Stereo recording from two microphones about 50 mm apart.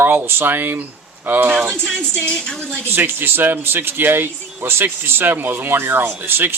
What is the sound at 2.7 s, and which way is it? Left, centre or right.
Speech, right.